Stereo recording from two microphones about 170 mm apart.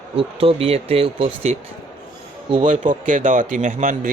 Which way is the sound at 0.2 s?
35° right (ahead or behind).